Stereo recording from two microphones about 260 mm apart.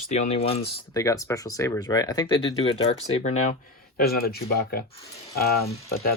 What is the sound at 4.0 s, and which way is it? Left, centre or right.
Speech, left.